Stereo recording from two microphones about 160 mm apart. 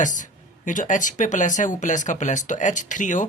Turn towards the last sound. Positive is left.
turn(degrees=50)  # may be behind; listen again after turning